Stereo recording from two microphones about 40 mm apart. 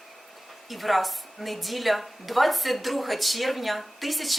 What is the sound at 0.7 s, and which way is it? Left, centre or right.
A woman's voice, centre.